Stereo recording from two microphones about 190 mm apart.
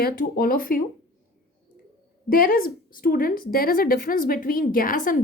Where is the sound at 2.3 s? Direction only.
50° left (ahead or behind).